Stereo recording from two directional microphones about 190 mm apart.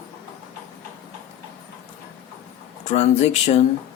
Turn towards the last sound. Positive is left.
turn(degrees=35)  # may be behind; listen again after turning